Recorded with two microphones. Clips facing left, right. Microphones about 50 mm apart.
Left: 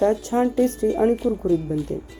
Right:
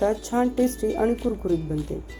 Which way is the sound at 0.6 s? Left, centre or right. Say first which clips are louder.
Left 3 dB; left.